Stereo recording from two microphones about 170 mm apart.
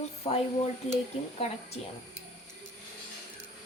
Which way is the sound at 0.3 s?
40° left (ahead or behind).